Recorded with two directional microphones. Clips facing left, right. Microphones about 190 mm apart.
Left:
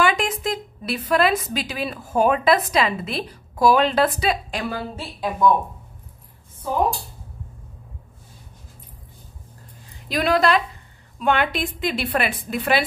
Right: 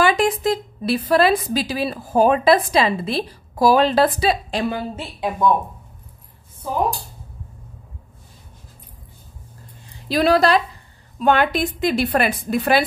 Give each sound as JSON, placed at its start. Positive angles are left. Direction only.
{"t": 0.0, "sound": "a woman's voice", "side_deg": -35}
{"t": 4.6, "sound": "a woman's voice", "side_deg": -20}
{"t": 10.0, "sound": "a woman's voice", "side_deg": -35}